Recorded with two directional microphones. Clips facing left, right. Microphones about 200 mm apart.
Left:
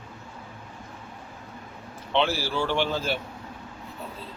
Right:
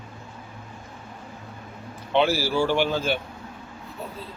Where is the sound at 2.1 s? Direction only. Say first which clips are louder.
Right 4 dB; 5° right (ahead or behind).